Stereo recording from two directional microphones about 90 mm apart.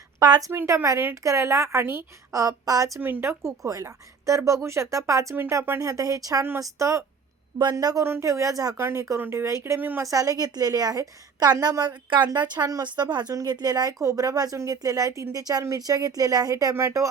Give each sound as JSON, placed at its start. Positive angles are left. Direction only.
{"t": 0.3, "sound": "speech", "side_deg": -45}
{"t": 0.5, "sound": "a woman's voice", "side_deg": -25}
{"t": 3.0, "sound": "a woman's voice", "side_deg": -25}
{"t": 5.8, "sound": "a woman's voice", "side_deg": -40}
{"t": 7.6, "sound": "speech", "side_deg": -45}
{"t": 8.0, "sound": "a woman's voice", "side_deg": -30}
{"t": 10.0, "sound": "speech", "side_deg": -40}
{"t": 12.8, "sound": "a woman's voice", "side_deg": -55}